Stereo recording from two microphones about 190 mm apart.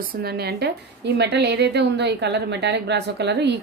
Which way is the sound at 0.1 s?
55° right (ahead or behind).